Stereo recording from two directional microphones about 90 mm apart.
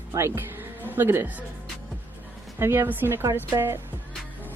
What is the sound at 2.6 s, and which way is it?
Speech, 25° right (ahead or behind).